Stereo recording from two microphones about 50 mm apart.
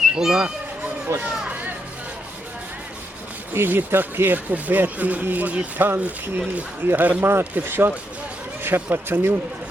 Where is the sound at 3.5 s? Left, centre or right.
Right.